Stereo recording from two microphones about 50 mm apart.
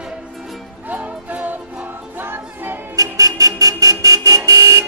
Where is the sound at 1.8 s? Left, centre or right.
Right.